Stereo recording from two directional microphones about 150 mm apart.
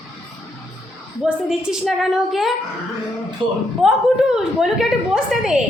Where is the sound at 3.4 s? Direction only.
35° right (ahead or behind).